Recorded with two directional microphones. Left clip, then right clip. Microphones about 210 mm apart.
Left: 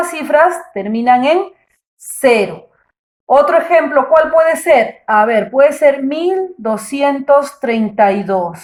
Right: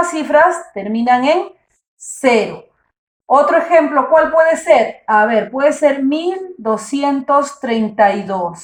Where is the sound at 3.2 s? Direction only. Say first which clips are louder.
Left 2 dB; 45° left (ahead or behind).